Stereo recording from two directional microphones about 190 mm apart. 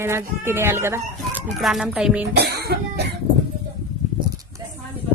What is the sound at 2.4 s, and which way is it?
Cough, 60° right (ahead or behind).